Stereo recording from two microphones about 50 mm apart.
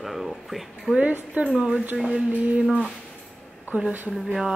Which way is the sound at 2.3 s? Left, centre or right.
Right.